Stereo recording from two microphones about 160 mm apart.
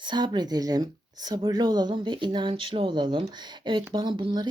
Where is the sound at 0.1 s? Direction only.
25° right (ahead or behind).